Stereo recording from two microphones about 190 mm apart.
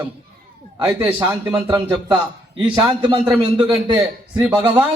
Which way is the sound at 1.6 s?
25° right (ahead or behind).